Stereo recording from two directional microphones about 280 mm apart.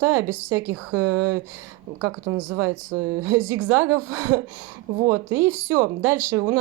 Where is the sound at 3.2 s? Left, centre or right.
Centre.